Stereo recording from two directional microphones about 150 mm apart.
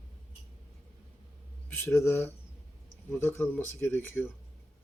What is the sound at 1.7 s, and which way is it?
Speech, 15° left (ahead or behind).